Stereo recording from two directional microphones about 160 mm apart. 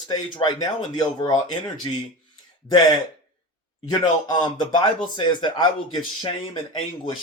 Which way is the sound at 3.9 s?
25° left (ahead or behind).